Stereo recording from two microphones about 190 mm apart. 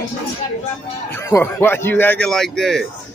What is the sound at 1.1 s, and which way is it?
A man's voice, 15° left (ahead or behind).